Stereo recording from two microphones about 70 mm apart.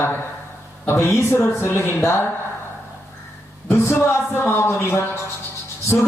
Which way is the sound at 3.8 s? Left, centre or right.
Left.